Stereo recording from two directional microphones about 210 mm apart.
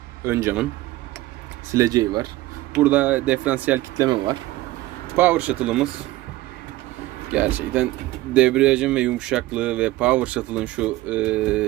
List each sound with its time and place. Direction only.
0.3 s speech: 10° right (ahead or behind)
1.7 s speech: 15° right (ahead or behind)
7.3 s speech: 5° right (ahead or behind)